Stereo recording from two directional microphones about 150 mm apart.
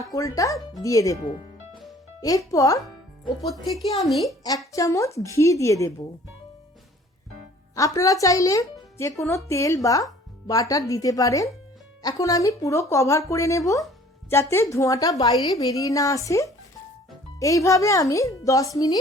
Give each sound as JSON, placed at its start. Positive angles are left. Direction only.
{"t": 0.1, "sound": "speech", "side_deg": 20}
{"t": 2.5, "sound": "speech", "side_deg": 20}
{"t": 3.4, "sound": "speech", "side_deg": 0}
{"t": 4.7, "sound": "speech", "side_deg": 20}
{"t": 7.8, "sound": "speech", "side_deg": 20}